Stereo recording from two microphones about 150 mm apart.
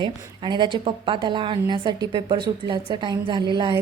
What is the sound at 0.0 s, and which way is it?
A woman's voice, 30° right (ahead or behind).